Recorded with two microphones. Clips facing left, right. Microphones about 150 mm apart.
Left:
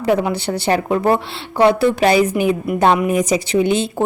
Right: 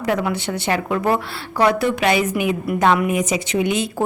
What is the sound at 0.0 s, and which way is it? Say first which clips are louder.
A woman's voice: left 4 dB; 25° left (ahead or behind).